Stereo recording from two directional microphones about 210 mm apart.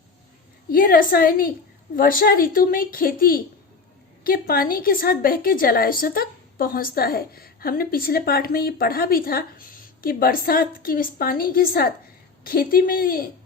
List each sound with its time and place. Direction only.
0.7 s a woman's voice: 45° left (ahead or behind)